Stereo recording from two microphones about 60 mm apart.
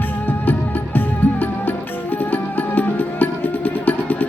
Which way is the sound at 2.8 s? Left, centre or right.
Left.